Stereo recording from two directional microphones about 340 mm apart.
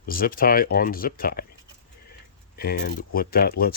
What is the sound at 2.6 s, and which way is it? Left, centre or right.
Speech, left.